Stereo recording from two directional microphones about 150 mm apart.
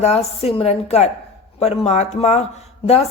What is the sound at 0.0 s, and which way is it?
Speech, 45° left (ahead or behind).